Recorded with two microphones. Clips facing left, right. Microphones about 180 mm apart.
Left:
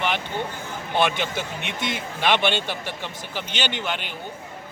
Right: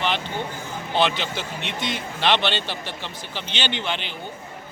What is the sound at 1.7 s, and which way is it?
Speech, 50° left (ahead or behind).